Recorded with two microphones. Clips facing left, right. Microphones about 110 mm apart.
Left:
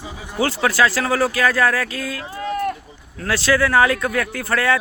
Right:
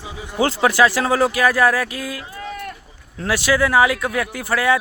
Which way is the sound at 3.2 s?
15° right (ahead or behind).